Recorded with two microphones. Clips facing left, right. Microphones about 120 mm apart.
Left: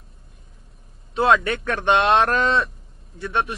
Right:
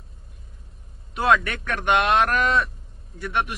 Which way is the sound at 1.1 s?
30° left (ahead or behind).